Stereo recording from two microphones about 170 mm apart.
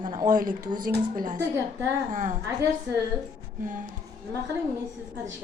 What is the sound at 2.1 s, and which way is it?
Speech, 50° right (ahead or behind).